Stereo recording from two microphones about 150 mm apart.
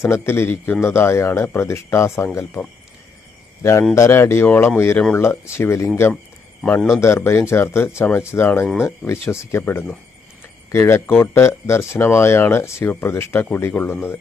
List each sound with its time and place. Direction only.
0.0 s speech: 15° left (ahead or behind)
3.6 s speech: 20° left (ahead or behind)